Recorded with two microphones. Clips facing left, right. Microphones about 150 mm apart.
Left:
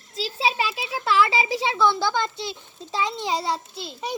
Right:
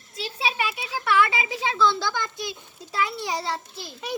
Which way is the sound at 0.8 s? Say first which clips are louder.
Left 1 dB; 25° left (ahead or behind).